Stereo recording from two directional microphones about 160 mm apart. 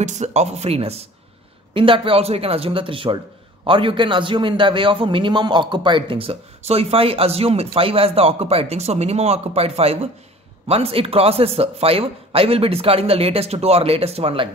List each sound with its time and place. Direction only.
0.0 s a man's voice: 45° right (ahead or behind)